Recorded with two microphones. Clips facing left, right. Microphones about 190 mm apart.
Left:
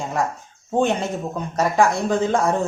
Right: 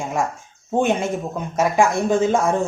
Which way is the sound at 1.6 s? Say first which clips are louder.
Right 1 dB; 15° right (ahead or behind).